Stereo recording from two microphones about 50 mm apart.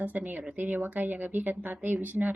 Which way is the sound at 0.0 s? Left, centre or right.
Right.